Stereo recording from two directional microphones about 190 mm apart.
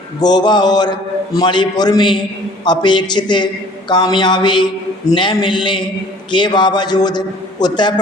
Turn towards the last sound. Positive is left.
turn(degrees=20)  # may be behind; listen again after turning